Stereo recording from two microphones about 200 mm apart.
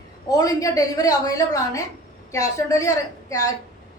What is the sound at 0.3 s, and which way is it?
A woman's voice, 15° left (ahead or behind).